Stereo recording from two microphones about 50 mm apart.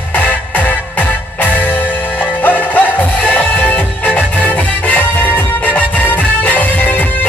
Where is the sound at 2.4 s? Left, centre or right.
Left.